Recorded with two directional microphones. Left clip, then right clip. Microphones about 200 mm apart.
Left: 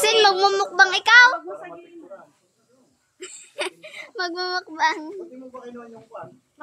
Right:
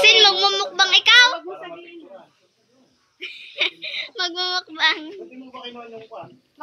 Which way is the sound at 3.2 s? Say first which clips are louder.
Right 6 dB; 40° left (ahead or behind).